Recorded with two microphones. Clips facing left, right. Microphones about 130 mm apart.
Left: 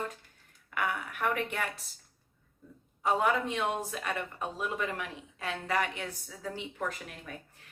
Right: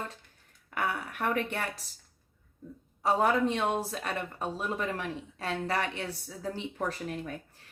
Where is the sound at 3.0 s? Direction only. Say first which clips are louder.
Right 2 dB; 35° right (ahead or behind).